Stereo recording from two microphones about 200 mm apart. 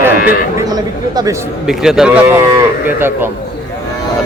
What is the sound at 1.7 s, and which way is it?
A man's voice, centre (ahead or behind).